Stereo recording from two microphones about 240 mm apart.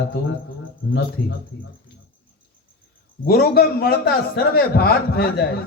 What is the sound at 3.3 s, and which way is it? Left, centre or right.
A man's voice, left.